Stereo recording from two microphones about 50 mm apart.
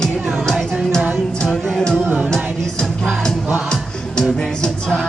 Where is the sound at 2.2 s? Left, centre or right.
Centre.